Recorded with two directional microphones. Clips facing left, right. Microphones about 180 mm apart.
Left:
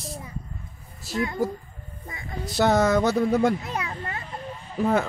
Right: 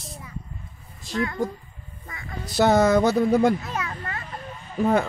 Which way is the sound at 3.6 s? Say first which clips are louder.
Even; 20° left (ahead or behind).